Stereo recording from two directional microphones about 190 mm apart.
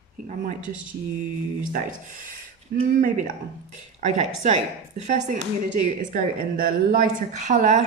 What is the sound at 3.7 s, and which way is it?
Speech, 40° right (ahead or behind).